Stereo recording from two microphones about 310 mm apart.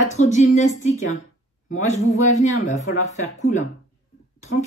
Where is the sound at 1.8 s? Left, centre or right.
Left.